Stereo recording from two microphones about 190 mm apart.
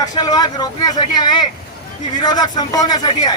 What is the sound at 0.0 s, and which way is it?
Speech, 20° left (ahead or behind).